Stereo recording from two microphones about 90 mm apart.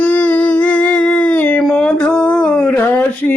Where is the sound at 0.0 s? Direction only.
20° left (ahead or behind).